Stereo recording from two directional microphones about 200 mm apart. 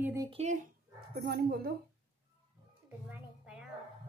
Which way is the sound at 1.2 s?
50° right (ahead or behind).